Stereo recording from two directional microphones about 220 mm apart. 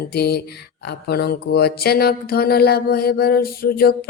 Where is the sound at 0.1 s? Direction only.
45° left (ahead or behind).